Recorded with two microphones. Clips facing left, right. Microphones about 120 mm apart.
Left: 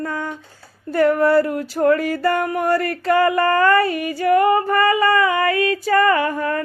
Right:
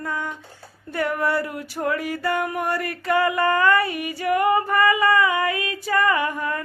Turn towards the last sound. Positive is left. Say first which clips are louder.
# left 5 dB
turn(degrees=45)  # may be behind; listen again after turning